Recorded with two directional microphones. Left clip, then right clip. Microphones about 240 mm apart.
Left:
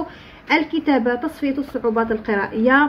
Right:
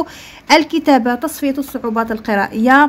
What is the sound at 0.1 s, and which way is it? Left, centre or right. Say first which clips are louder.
A woman's voice: right 8 dB; right.